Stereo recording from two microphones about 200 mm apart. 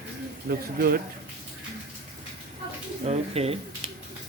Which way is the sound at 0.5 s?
50° right (ahead or behind).